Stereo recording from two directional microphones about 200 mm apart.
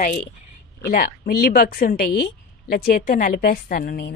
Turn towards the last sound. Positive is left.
turn(degrees=50)  # may be behind; listen again after turning